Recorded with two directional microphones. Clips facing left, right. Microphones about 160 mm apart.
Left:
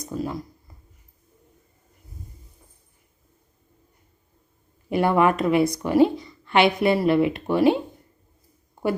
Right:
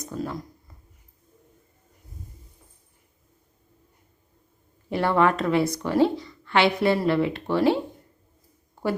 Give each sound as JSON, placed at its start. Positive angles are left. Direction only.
{"t": 0.0, "sound": "speech", "side_deg": 10}
{"t": 4.9, "sound": "a woman's voice", "side_deg": 15}